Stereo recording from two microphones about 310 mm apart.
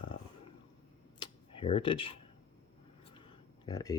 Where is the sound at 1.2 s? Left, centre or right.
Centre.